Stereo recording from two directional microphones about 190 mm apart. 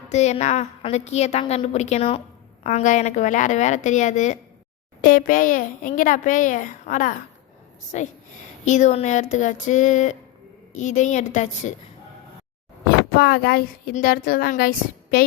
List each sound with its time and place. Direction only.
0.1 s a woman's voice: 35° left (ahead or behind)
13.1 s a woman's voice: 55° left (ahead or behind)